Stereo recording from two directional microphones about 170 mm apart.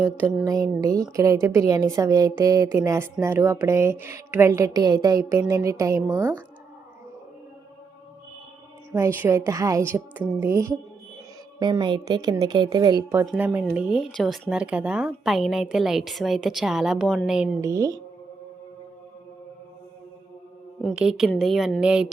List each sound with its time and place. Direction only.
0.4 s a woman's voice: 20° right (ahead or behind)
8.9 s a woman's voice: 15° right (ahead or behind)
13.2 s speech: 10° right (ahead or behind)
17.6 s a woman's voice: 20° right (ahead or behind)
20.8 s speech: 5° right (ahead or behind)